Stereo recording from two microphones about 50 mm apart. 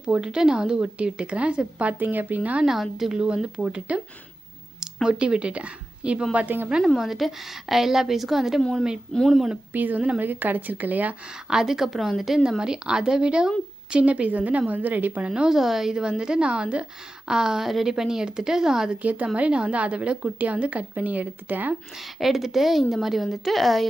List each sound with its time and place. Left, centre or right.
0.0 s a woman's voice: centre
2.6 s speech: centre
3.1 s a woman's voice: centre
5.0 s a woman's voice: centre
7.0 s a woman's voice: centre
9.1 s a woman's voice: centre
9.7 s a woman's voice: right
11.4 s a woman's voice: centre
13.9 s a woman's voice: right
15.4 s a woman's voice: centre
19.0 s a woman's voice: right
22.2 s speech: centre